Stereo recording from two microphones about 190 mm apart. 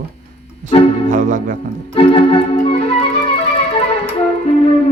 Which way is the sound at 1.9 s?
30° left (ahead or behind).